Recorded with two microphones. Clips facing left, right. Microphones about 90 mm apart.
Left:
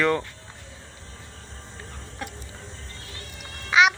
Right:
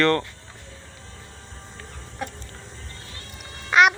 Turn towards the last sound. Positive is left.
turn(degrees=0)  # may be behind; listen again after turning